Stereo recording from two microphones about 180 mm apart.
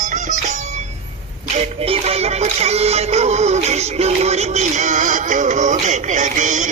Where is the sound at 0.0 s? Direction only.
45° right (ahead or behind).